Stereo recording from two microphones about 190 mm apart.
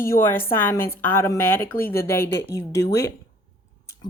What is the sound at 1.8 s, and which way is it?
Speech, 55° left (ahead or behind).